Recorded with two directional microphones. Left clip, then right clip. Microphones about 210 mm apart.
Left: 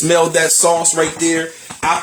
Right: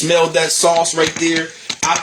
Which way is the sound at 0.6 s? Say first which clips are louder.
Right 1 dB; 5° left (ahead or behind).